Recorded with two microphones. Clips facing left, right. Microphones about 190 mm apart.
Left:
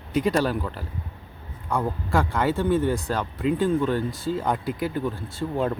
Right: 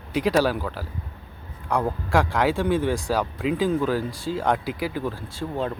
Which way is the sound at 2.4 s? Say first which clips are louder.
Even; 80° right.